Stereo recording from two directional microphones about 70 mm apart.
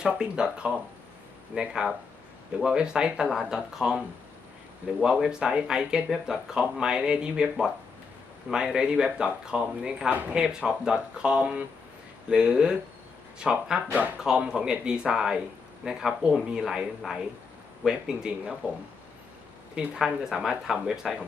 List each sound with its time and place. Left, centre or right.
0.0 s speech: centre
10.1 s speech: right
10.3 s speech: centre
19.7 s speech: centre